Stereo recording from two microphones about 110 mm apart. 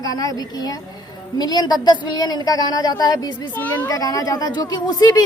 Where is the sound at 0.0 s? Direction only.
35° left (ahead or behind).